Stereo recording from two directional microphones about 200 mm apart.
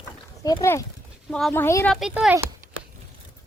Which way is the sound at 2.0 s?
5° right (ahead or behind).